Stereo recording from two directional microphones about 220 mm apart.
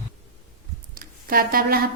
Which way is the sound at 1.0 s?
40° right (ahead or behind).